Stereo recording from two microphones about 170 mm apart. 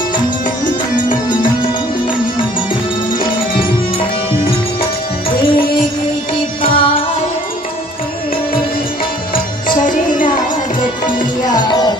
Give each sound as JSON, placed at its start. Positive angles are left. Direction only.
{"t": 0.7, "sound": "music", "side_deg": 50}
{"t": 6.6, "sound": "music", "side_deg": 30}
{"t": 9.7, "sound": "music", "side_deg": 50}
{"t": 11.1, "sound": "tabla", "side_deg": 25}